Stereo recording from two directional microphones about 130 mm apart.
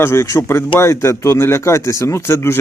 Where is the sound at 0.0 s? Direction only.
20° left (ahead or behind).